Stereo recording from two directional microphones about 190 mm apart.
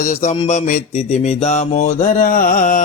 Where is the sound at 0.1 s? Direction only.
35° left (ahead or behind).